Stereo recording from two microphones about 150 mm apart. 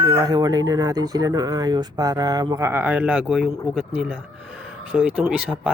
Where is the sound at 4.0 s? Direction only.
5° right (ahead or behind).